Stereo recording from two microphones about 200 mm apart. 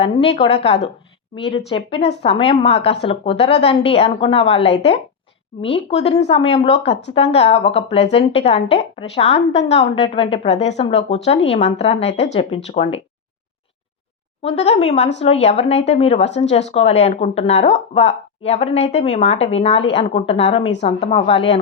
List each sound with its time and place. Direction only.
0.0 s a woman's voice: 30° left (ahead or behind)
14.4 s a woman's voice: 35° left (ahead or behind)